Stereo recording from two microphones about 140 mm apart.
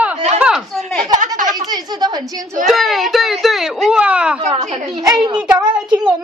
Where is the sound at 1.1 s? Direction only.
70° right (ahead or behind).